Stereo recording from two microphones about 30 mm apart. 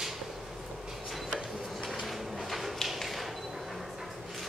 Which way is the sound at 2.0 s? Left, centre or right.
Centre.